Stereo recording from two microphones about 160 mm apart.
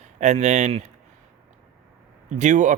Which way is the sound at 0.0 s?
45° right (ahead or behind).